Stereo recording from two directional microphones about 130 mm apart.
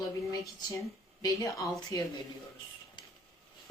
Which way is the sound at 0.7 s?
25° left (ahead or behind).